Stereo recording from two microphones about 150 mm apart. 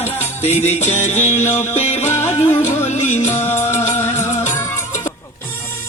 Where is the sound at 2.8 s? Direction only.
50° left (ahead or behind).